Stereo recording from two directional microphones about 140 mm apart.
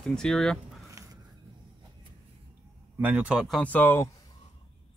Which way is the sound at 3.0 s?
10° right (ahead or behind).